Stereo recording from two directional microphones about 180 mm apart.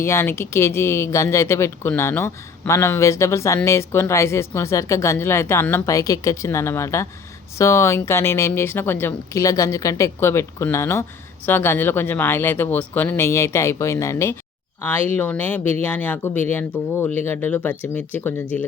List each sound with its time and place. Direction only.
0.0 s speech: 15° left (ahead or behind)